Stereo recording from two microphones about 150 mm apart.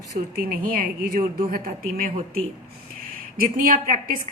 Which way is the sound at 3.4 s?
65° right (ahead or behind).